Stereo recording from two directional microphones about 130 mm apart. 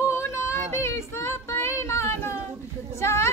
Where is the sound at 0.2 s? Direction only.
20° left (ahead or behind).